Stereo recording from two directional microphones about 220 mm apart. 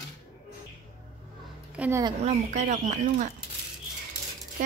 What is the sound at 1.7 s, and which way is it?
Speech, 5° right (ahead or behind).